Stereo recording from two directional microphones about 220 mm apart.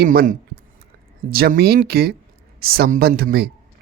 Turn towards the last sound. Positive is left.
turn(degrees=-45)  # may be behind; listen again after turning